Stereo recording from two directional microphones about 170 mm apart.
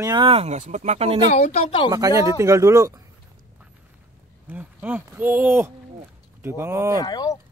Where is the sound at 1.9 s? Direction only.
20° right (ahead or behind).